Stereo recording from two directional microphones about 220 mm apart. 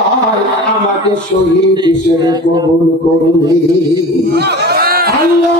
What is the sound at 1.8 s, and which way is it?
Speech, 15° right (ahead or behind).